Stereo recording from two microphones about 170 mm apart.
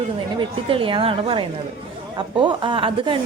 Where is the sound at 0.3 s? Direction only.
30° right (ahead or behind).